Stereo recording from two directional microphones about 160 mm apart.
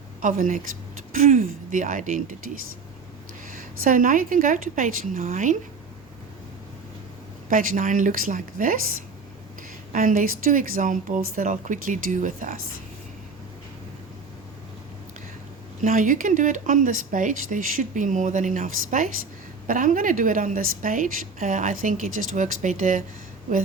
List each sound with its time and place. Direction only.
0.2 s speech: 55° right (ahead or behind)
3.5 s a woman's voice: 55° right (ahead or behind)
7.5 s a woman's voice: 55° right (ahead or behind)
9.9 s a woman's voice: 55° right (ahead or behind)
15.8 s a woman's voice: 55° right (ahead or behind)